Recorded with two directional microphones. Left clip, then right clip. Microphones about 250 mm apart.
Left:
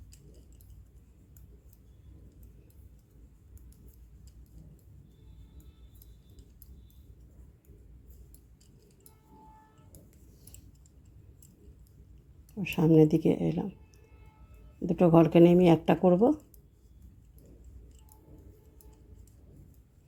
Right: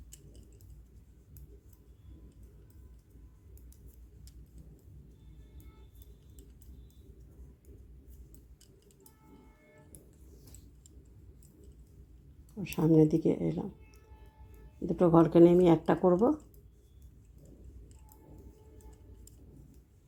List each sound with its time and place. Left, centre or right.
12.5 s speech: centre
14.8 s speech: centre